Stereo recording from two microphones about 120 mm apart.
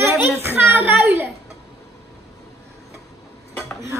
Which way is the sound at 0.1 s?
20° right (ahead or behind).